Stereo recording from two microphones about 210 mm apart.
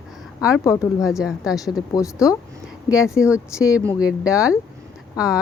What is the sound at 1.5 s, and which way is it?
Speech, 15° left (ahead or behind).